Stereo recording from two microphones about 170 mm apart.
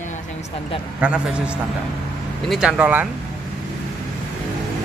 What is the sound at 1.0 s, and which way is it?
Speech, 5° right (ahead or behind).